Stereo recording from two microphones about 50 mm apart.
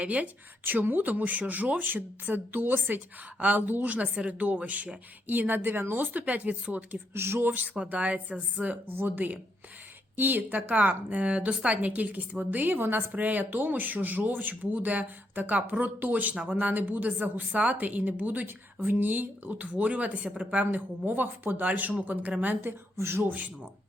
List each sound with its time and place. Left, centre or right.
0.0 s speech: right
0.6 s a woman's voice: right
6.2 s speech: right
7.1 s speech: right
7.5 s speech: right
8.9 s a woman's voice: right
16.3 s a woman's voice: right
20.7 s a woman's voice: right
23.0 s a man's voice: right
23.2 s a woman's voice: right